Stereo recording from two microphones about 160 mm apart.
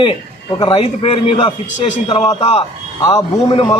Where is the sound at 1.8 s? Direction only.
45° left (ahead or behind).